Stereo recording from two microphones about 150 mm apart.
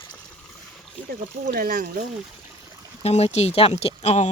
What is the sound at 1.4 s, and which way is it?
Speech, 70° right (ahead or behind).